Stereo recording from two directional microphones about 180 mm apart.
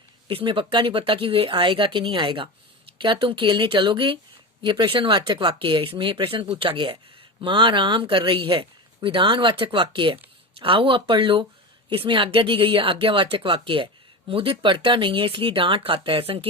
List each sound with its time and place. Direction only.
0.3 s speech: 30° right (ahead or behind)